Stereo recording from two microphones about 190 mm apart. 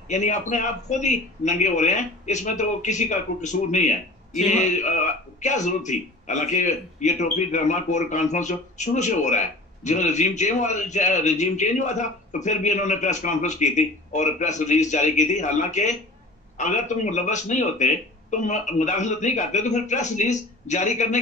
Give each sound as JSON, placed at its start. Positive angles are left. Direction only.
{"t": 0.1, "sound": "a man's voice", "side_deg": 40}